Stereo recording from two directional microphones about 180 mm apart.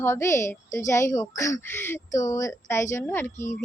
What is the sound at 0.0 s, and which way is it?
Speech, 15° left (ahead or behind).